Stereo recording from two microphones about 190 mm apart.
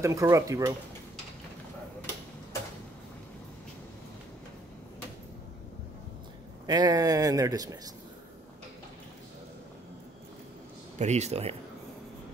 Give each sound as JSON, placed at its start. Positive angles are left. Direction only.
{"t": 0.0, "sound": "speech", "side_deg": -15}
{"t": 6.6, "sound": "a man's voice", "side_deg": -20}
{"t": 11.0, "sound": "speech", "side_deg": -35}